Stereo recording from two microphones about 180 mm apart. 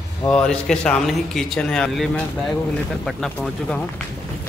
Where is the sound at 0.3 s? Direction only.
5° left (ahead or behind).